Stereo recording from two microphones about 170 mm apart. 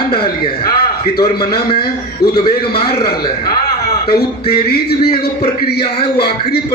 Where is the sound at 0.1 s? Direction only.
30° left (ahead or behind).